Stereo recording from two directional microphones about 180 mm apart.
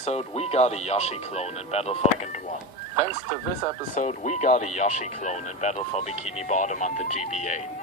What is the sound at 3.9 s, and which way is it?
Speech, 40° left (ahead or behind).